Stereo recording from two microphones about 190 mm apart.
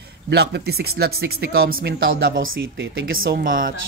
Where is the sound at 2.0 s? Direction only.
90° right.